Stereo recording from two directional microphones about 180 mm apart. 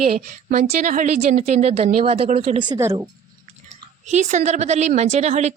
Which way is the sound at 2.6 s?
20° right (ahead or behind).